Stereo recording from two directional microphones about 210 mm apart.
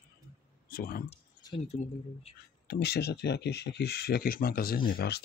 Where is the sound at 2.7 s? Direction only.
50° left (ahead or behind).